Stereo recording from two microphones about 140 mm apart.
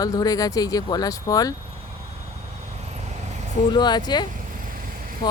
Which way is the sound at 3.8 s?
30° left (ahead or behind).